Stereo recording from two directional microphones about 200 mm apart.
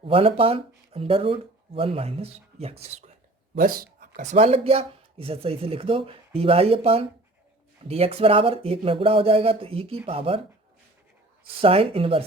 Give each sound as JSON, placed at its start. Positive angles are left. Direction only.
{"t": 0.0, "sound": "speech", "side_deg": -25}
{"t": 3.5, "sound": "speech", "side_deg": -45}
{"t": 11.6, "sound": "speech", "side_deg": -30}